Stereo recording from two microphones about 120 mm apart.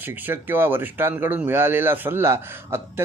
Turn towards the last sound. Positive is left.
turn(degrees=-20)  # may be behind; listen again after turning